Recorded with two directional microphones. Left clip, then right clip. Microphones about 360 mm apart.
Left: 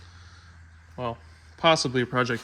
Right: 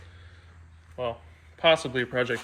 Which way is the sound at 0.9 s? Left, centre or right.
Centre.